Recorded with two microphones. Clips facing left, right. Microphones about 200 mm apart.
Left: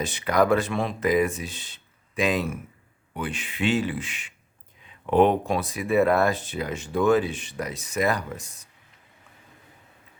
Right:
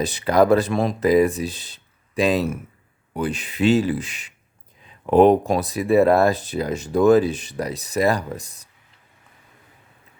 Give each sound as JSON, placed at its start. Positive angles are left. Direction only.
{"t": 0.0, "sound": "speech", "side_deg": -35}